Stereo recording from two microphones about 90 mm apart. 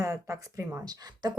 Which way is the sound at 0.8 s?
50° right (ahead or behind).